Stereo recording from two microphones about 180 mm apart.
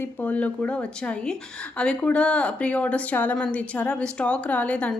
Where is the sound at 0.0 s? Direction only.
10° left (ahead or behind).